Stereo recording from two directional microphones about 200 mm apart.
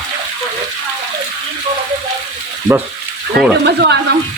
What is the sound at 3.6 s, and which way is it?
Speech, 55° right (ahead or behind).